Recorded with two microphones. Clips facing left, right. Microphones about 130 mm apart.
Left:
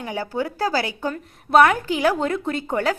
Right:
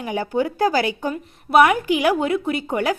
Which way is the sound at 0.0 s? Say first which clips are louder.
Right 4 dB; 20° right (ahead or behind).